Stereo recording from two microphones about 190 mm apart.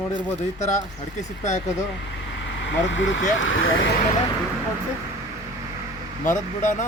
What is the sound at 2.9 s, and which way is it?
Speech, 75° left (ahead or behind).